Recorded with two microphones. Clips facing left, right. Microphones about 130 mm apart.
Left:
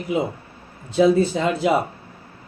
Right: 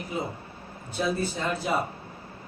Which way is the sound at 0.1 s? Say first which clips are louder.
Left 10 dB; 90° left.